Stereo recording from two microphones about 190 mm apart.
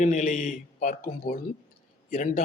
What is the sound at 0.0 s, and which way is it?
Speech, 40° left (ahead or behind).